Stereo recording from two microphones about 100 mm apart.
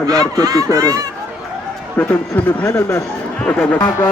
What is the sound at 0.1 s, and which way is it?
Speech, 40° right (ahead or behind).